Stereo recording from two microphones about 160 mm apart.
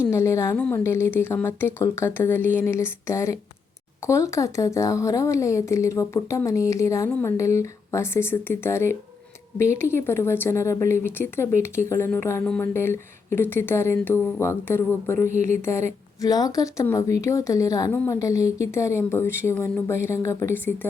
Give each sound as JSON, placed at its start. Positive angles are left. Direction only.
{"t": 0.0, "sound": "a woman's voice", "side_deg": 15}